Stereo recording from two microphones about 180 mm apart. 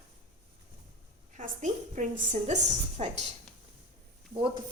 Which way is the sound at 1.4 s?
45° right (ahead or behind).